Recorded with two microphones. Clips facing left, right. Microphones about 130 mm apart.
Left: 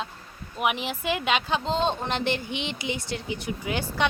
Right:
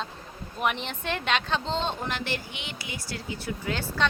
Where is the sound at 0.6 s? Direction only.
5° left (ahead or behind).